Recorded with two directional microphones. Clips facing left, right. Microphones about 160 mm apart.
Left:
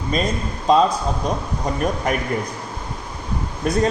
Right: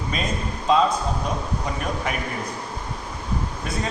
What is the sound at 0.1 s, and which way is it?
Speech, 40° left (ahead or behind).